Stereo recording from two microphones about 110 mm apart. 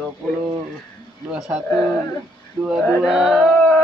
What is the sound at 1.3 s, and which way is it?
Speech, 5° right (ahead or behind).